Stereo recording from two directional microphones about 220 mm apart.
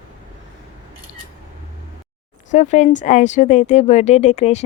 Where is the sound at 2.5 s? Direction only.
30° left (ahead or behind).